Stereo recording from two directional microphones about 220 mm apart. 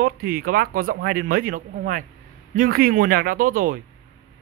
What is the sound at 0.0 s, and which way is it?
A man's voice, 40° right (ahead or behind).